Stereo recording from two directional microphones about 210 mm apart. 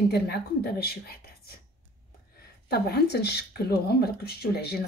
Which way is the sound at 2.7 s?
50° left (ahead or behind).